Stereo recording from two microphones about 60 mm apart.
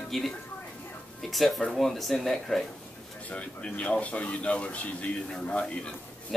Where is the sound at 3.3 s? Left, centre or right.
Left.